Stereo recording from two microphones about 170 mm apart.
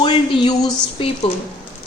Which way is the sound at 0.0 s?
30° left (ahead or behind).